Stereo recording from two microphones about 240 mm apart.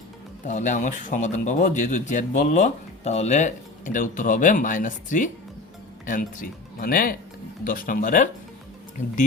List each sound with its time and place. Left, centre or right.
0.4 s speech: left